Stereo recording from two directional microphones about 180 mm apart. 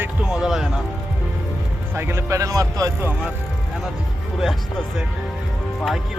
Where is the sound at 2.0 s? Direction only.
15° right (ahead or behind).